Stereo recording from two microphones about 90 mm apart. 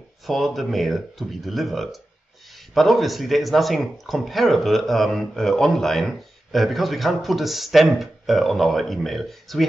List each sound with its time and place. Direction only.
0.3 s speech: centre (ahead or behind)